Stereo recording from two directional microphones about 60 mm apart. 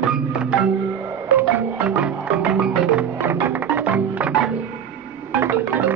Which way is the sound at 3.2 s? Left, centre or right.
Right.